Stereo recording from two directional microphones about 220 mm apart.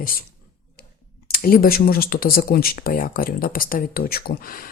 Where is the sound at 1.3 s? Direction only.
40° left (ahead or behind).